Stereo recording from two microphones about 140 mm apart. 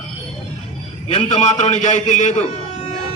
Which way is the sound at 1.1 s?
50° left (ahead or behind).